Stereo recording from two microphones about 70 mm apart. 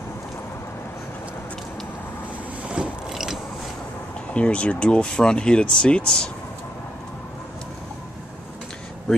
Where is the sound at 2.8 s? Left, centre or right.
Centre.